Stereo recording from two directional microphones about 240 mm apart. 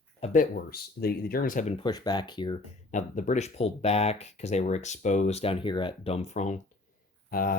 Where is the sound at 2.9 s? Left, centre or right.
Left.